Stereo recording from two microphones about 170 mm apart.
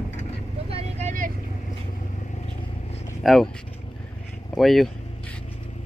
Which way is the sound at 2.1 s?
45° left (ahead or behind).